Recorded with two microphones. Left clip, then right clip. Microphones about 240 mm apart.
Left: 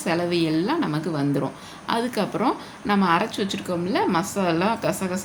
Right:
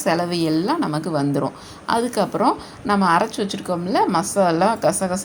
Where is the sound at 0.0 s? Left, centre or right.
Centre.